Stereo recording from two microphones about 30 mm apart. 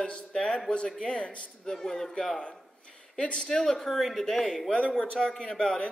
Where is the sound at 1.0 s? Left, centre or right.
Left.